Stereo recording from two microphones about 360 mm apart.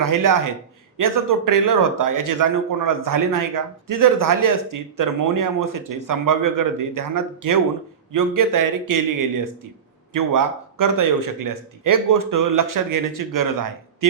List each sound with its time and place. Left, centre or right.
0.0 s a man's voice: right